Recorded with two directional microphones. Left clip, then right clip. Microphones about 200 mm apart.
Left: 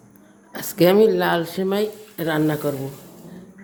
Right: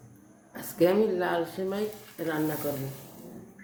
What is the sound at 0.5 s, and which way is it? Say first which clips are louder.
Speech: left 8 dB; 50° left (ahead or behind).